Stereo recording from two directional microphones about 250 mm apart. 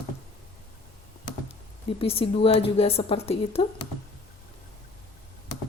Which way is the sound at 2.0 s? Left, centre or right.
Left.